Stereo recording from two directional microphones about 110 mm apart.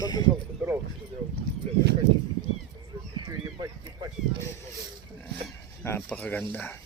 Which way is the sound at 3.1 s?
35° right (ahead or behind).